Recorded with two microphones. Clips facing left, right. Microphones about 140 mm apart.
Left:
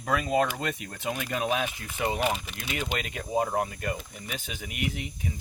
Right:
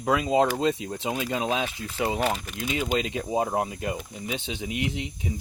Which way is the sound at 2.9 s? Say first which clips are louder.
Right 1 dB; 25° right (ahead or behind).